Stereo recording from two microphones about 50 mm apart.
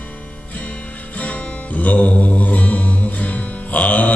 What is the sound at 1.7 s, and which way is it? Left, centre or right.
Music, left.